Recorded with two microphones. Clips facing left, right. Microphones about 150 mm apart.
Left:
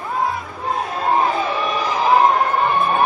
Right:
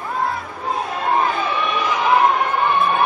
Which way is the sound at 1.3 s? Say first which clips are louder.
Left 1 dB; 35° left (ahead or behind).